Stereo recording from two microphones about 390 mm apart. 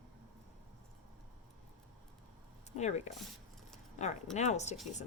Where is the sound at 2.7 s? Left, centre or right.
Centre.